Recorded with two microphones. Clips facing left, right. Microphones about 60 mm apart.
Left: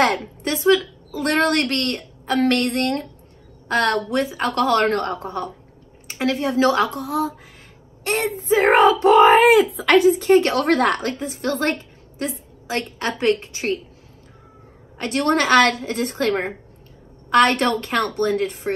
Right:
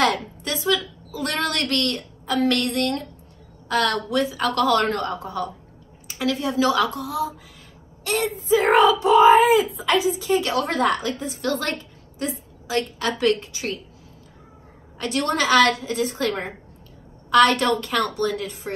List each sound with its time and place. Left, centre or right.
0.0 s a woman's voice: left
9.0 s speech: left
9.9 s a woman's voice: left
15.0 s a woman's voice: left